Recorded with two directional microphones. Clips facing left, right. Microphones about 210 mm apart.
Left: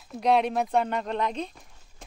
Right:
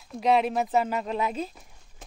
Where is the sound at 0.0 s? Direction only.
Centre (ahead or behind).